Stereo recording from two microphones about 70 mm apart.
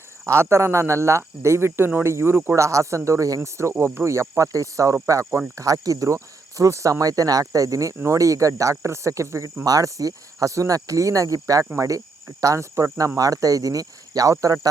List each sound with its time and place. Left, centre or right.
0.3 s speech: right
2.6 s speech: right
3.6 s speech: right
9.6 s speech: right
13.1 s speech: right